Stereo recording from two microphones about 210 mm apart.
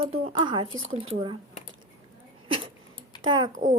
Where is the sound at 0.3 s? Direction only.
20° right (ahead or behind).